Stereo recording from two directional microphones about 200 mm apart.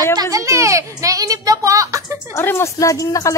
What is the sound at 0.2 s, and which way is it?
A child's voice, 15° right (ahead or behind).